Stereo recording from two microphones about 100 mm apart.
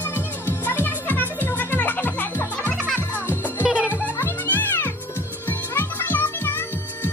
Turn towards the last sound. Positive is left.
turn(degrees=20)  # may be behind; listen again after turning